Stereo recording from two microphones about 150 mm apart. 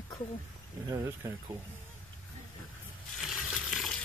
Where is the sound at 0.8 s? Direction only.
20° right (ahead or behind).